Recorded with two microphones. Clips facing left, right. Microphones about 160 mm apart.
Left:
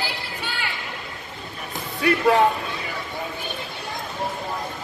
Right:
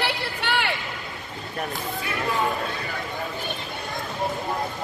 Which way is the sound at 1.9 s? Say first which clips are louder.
Left 11 dB; 70° left (ahead or behind).